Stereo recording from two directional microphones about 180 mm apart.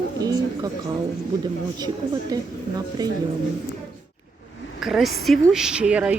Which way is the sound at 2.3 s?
20° right (ahead or behind).